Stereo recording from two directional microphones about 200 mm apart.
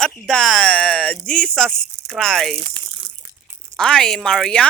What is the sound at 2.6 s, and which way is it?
Speech, 25° right (ahead or behind).